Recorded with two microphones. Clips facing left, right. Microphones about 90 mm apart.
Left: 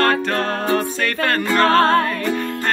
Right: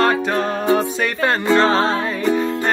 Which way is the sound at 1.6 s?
55° left (ahead or behind).